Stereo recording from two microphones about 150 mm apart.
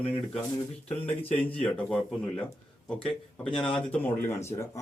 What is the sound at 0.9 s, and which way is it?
Speech, 10° left (ahead or behind).